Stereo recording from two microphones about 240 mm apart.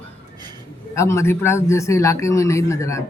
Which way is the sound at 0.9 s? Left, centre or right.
Centre.